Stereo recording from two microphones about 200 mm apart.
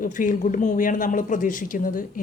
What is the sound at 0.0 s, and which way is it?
Speech, 40° left (ahead or behind).